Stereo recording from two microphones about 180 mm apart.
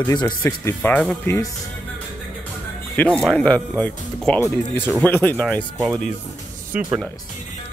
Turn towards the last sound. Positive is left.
turn(degrees=-5)  # may be behind; listen again after turning